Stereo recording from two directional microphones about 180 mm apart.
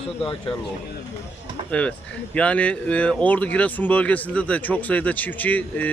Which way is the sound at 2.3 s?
5° left (ahead or behind).